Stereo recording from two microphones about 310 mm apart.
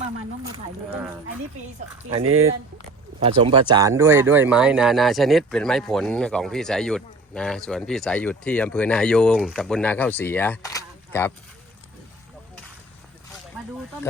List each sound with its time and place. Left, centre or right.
0.4 s a sound: centre
2.0 s speech: right
3.2 s speech: centre